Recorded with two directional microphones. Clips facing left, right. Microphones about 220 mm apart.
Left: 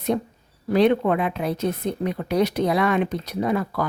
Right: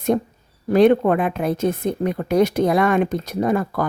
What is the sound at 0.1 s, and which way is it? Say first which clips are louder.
A woman's voice: right 4 dB; 45° right (ahead or behind).